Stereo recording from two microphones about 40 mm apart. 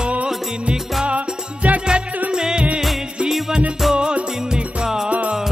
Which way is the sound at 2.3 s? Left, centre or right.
Centre.